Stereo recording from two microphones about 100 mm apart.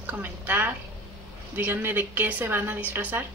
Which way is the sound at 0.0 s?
20° right (ahead or behind).